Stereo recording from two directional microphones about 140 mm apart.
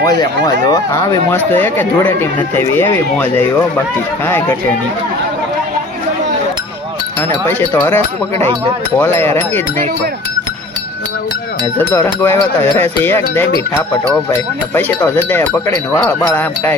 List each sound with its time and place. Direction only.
0.0 s speech: 25° left (ahead or behind)
1.5 s speech: 15° left (ahead or behind)
7.2 s speech: 15° left (ahead or behind)
11.8 s speech: 15° left (ahead or behind)